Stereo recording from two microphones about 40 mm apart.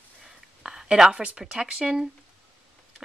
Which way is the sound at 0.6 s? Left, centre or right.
Centre.